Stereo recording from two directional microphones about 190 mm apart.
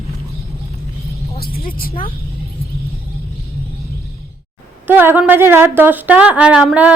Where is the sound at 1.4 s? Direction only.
50° left (ahead or behind).